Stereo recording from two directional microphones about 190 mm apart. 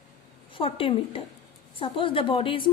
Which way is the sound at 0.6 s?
30° left (ahead or behind).